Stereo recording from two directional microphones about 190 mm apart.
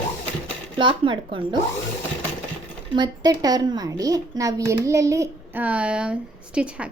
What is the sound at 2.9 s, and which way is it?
A woman's voice, 20° right (ahead or behind).